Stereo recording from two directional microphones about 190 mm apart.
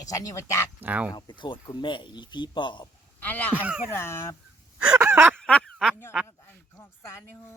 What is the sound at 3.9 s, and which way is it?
Speech, 15° left (ahead or behind).